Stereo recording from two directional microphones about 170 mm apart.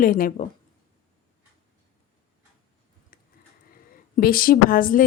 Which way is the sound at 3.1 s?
60° left (ahead or behind).